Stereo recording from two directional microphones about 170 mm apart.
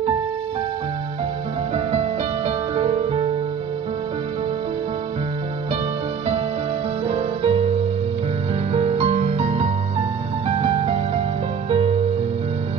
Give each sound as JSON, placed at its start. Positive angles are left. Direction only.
{"t": 1.9, "sound": "music", "side_deg": -35}
{"t": 7.1, "sound": "music", "side_deg": -35}
{"t": 8.7, "sound": "music", "side_deg": -35}